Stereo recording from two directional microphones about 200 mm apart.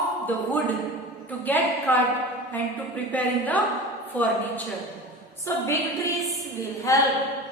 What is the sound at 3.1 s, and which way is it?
A woman's voice, 10° left (ahead or behind).